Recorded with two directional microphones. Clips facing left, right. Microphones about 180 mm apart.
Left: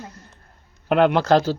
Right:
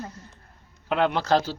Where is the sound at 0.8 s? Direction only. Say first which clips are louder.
Left 6 dB; 55° left (ahead or behind).